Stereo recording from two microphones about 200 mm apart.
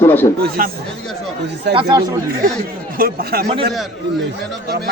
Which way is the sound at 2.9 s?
45° right (ahead or behind).